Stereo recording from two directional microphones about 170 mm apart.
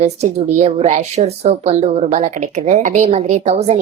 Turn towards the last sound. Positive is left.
turn(degrees=-40)  # may be behind; listen again after turning